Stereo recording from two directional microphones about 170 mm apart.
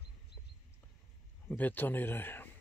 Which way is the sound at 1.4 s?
10° left (ahead or behind).